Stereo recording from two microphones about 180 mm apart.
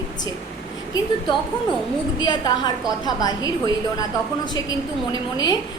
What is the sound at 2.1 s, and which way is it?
A woman's voice, 25° left (ahead or behind).